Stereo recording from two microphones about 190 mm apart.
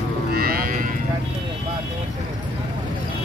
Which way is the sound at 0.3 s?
55° right (ahead or behind).